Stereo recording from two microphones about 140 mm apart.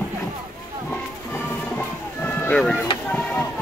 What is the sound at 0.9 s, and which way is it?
Music, 15° left (ahead or behind).